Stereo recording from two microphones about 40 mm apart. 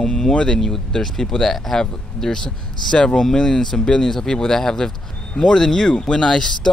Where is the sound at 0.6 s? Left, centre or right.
Centre.